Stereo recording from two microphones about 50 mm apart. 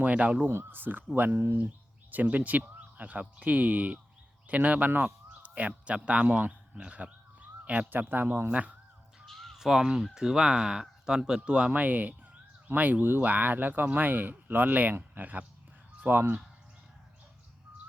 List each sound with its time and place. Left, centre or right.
0.0 s speech: right
0.4 s speech: right
1.6 s a man's voice: right
7.9 s speech: right
8.4 s speech: right
9.2 s crow: centre
9.6 s speech: centre; by 16.4 s right